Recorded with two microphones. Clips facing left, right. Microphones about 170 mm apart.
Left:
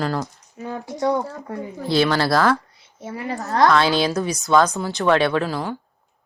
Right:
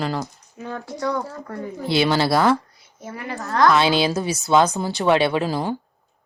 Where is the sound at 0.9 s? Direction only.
20° left (ahead or behind).